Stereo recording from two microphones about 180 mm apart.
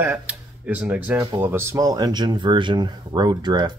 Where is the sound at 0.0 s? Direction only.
10° right (ahead or behind).